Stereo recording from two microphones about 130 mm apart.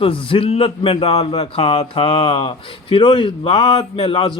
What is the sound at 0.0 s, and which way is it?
Speech, 45° left (ahead or behind).